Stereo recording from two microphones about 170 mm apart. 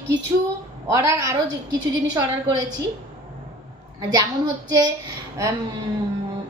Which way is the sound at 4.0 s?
20° right (ahead or behind).